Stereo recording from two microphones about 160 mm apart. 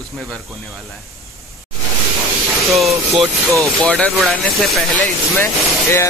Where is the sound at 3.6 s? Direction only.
10° left (ahead or behind).